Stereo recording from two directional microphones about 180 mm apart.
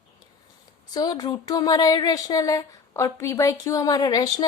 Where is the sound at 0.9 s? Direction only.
20° left (ahead or behind).